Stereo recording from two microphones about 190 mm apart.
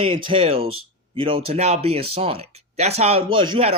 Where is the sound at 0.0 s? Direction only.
25° right (ahead or behind).